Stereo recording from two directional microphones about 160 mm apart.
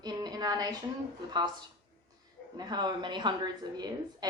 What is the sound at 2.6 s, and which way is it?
A woman's voice, 25° right (ahead or behind).